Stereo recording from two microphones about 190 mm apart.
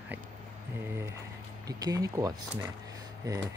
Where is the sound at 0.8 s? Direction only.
15° right (ahead or behind).